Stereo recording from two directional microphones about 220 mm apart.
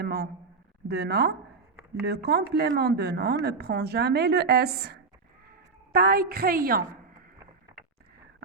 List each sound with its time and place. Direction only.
0.0 s a man's voice: 45° right (ahead or behind)